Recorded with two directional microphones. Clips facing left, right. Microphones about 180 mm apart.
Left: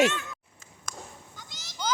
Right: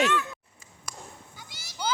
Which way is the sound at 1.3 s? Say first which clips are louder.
Right 1 dB; 10° right (ahead or behind).